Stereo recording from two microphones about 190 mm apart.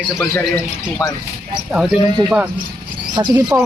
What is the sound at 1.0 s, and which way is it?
Speech, 20° left (ahead or behind).